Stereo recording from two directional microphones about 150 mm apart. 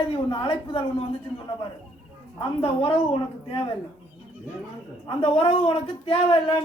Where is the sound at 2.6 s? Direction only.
40° left (ahead or behind).